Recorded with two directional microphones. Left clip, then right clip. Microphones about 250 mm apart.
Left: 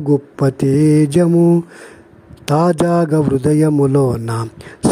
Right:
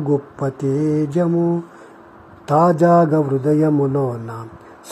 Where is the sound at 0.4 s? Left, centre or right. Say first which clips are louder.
Left 6 dB; left.